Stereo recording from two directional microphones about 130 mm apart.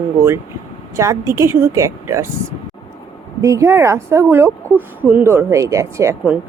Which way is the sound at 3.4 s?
25° right (ahead or behind).